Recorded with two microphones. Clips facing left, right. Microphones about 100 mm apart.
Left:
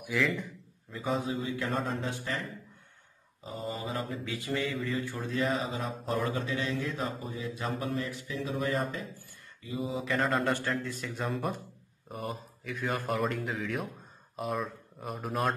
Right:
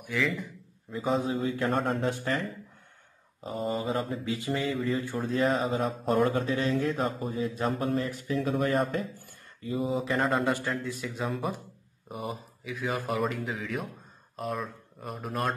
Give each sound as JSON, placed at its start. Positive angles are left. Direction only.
{"t": 0.0, "sound": "a man's voice", "side_deg": 0}
{"t": 0.9, "sound": "mantra", "side_deg": -35}
{"t": 3.4, "sound": "mantra", "side_deg": -45}
{"t": 4.2, "sound": "speech", "side_deg": -20}
{"t": 4.8, "sound": "mantra", "side_deg": -35}
{"t": 10.0, "sound": "speech", "side_deg": -25}
{"t": 10.5, "sound": "speech", "side_deg": -5}